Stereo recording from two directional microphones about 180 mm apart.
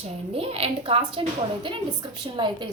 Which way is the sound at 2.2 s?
25° right (ahead or behind).